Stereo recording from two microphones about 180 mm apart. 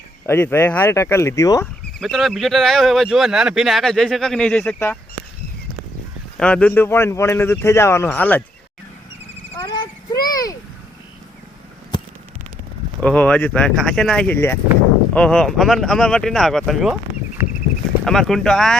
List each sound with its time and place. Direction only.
0.3 s speech: 10° left (ahead or behind)
2.0 s speech: centre (ahead or behind)
6.3 s speech: 5° left (ahead or behind)
9.6 s a sound: 25° left (ahead or behind)
13.0 s speech: 10° left (ahead or behind)
17.4 s a sound: 10° right (ahead or behind)
18.0 s speech: centre (ahead or behind)